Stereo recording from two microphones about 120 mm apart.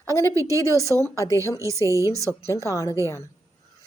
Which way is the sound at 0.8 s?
25° left (ahead or behind).